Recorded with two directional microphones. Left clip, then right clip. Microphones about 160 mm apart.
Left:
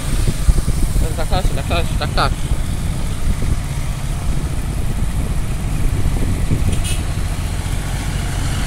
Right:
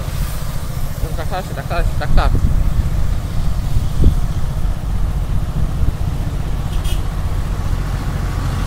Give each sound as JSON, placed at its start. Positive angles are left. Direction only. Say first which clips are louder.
{"t": 1.3, "sound": "speech", "louder": "left 1 dB", "side_deg": 15}